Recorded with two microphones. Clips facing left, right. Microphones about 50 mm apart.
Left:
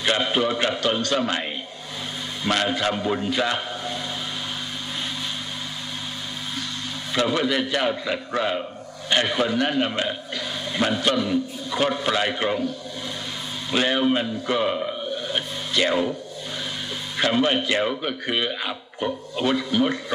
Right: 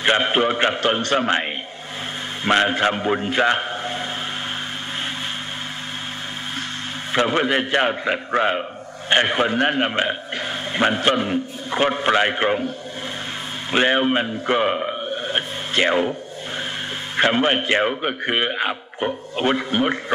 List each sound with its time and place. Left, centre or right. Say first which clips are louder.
0.0 s a man's voice: right 4 dB; right
7.1 s a man's voice: right 3 dB; right
17.2 s a man's voice: right 3 dB; right